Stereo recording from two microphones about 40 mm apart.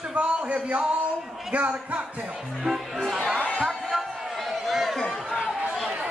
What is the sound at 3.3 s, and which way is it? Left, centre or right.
Chatter, left.